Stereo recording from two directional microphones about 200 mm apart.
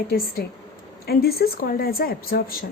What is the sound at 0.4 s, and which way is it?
A woman's voice, 50° left (ahead or behind).